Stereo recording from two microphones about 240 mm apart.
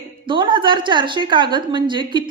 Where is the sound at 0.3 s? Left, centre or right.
Centre.